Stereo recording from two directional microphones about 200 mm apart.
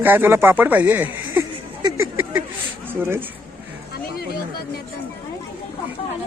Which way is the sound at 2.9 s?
10° right (ahead or behind).